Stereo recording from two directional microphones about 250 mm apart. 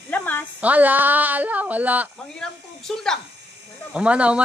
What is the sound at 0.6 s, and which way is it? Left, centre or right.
A woman's voice, centre.